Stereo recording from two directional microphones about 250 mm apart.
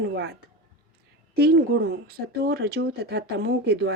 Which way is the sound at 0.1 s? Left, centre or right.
Right.